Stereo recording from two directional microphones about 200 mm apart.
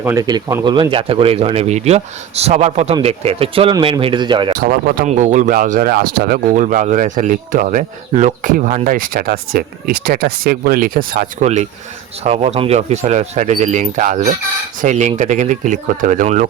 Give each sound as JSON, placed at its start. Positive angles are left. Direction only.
{"t": 0.0, "sound": "speech", "side_deg": -15}
{"t": 4.5, "sound": "speech", "side_deg": -45}
{"t": 5.1, "sound": "speech", "side_deg": -35}